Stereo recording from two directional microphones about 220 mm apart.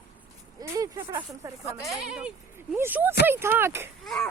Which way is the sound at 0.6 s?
10° right (ahead or behind).